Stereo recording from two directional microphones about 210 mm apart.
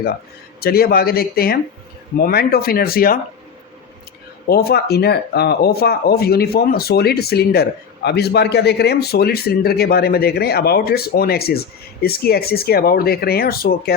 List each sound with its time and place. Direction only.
0.6 s speech: 45° left (ahead or behind)
4.4 s speech: 50° left (ahead or behind)